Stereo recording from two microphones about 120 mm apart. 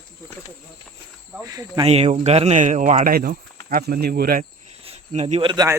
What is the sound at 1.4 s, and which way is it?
Speech, 35° right (ahead or behind).